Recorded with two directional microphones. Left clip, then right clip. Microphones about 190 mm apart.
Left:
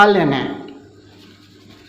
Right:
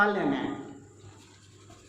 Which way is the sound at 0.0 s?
55° left (ahead or behind).